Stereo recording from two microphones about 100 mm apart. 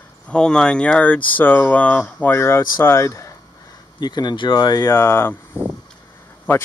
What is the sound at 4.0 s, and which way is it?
Speech, 45° left (ahead or behind).